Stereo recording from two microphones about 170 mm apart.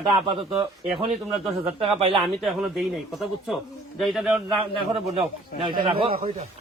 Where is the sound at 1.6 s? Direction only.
35° right (ahead or behind).